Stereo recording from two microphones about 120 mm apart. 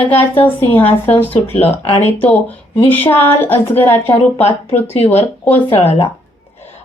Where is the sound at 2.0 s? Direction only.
15° left (ahead or behind).